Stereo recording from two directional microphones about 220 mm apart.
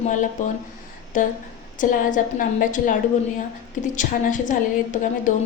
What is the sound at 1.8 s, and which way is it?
A woman's voice, 35° left (ahead or behind).